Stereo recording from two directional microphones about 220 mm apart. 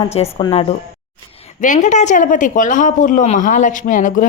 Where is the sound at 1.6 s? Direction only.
35° left (ahead or behind).